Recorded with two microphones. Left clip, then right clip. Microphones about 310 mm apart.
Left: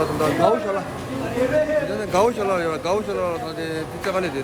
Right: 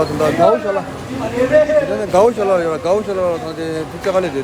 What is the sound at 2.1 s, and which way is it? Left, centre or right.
Speech, centre.